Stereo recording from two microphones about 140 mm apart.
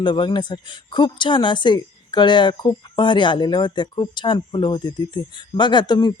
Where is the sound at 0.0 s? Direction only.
35° left (ahead or behind).